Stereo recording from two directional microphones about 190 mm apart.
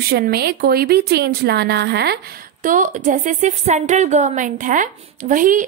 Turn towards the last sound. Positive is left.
turn(degrees=-45)  # may be behind; listen again after turning